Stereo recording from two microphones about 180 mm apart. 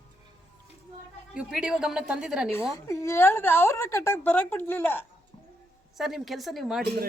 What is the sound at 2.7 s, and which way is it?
A woman's voice, 15° left (ahead or behind).